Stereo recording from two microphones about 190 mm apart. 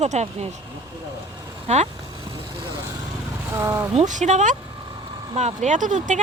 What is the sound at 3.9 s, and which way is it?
Speech, 40° right (ahead or behind).